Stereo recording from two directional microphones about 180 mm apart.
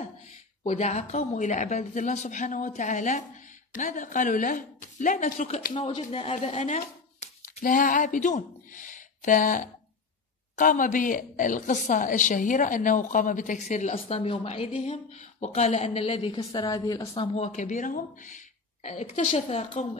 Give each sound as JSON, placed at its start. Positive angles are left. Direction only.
{"t": 0.7, "sound": "a woman's voice", "side_deg": 40}
{"t": 17.1, "sound": "speech", "side_deg": 35}